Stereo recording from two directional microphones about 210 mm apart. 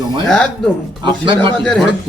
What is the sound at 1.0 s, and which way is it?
Speech, 25° right (ahead or behind).